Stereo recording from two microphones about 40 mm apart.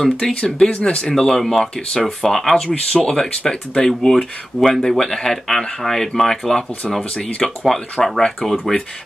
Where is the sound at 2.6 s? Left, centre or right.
Centre.